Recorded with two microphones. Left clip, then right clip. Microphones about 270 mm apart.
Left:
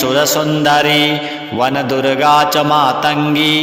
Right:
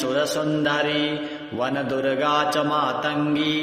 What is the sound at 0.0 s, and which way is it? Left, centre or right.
Mantra, left.